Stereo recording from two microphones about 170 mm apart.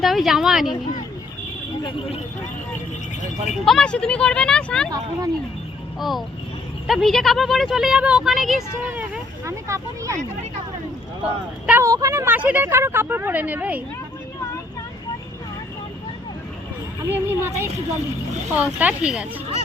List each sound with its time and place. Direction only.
0.0 s speech: centre (ahead or behind)
1.8 s speech: 35° left (ahead or behind)
3.7 s speech: 5° left (ahead or behind)
6.0 s speech: centre (ahead or behind)
9.5 s speech: 15° right (ahead or behind)
11.2 s speech: 5° right (ahead or behind)
11.8 s speech: 20° right (ahead or behind)
17.1 s speech: 15° right (ahead or behind)